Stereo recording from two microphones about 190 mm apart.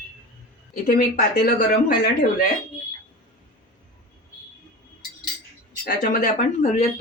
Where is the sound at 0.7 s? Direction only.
45° left (ahead or behind).